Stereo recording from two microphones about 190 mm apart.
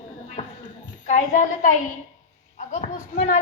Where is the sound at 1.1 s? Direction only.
40° left (ahead or behind).